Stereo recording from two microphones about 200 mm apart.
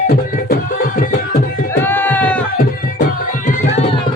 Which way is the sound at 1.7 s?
10° left (ahead or behind).